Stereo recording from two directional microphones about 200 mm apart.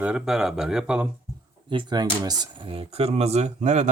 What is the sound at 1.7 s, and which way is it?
Speech, 20° right (ahead or behind).